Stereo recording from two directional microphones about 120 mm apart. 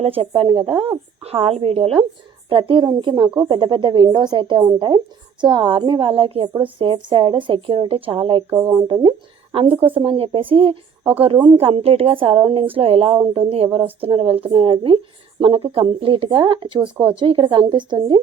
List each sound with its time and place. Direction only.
0.0 s a woman's voice: 55° right (ahead or behind)
8.5 s speech: 30° right (ahead or behind)
9.0 s a woman's voice: 50° right (ahead or behind)